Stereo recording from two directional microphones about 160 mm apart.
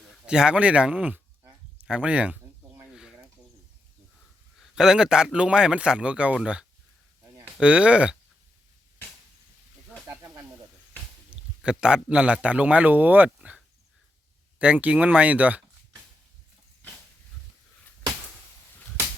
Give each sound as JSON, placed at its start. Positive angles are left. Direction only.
{"t": 0.3, "sound": "speech", "side_deg": -5}
{"t": 1.8, "sound": "a sound", "side_deg": -5}
{"t": 4.6, "sound": "a man's voice", "side_deg": -5}
{"t": 10.1, "sound": "snake", "side_deg": -20}
{"t": 11.3, "sound": "speech", "side_deg": -5}
{"t": 14.6, "sound": "speech", "side_deg": -10}